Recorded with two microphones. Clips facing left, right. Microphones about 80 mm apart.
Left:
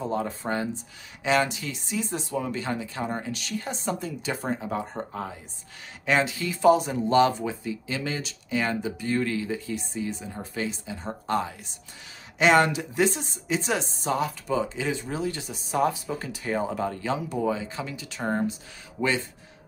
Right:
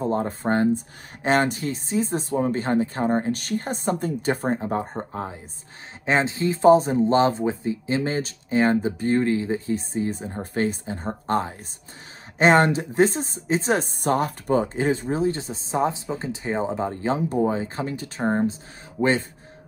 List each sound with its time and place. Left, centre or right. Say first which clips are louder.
0.0 s speech: right 4 dB; right
4.6 s speech: right 4 dB; right